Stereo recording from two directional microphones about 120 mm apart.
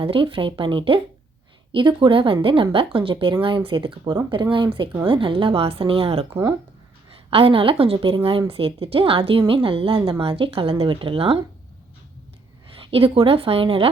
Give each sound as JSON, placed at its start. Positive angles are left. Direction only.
{"t": 0.0, "sound": "a woman's voice", "side_deg": -50}
{"t": 7.3, "sound": "a woman's voice", "side_deg": -50}
{"t": 12.9, "sound": "a woman's voice", "side_deg": -50}